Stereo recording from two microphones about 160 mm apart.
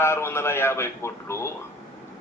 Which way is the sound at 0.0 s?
15° left (ahead or behind).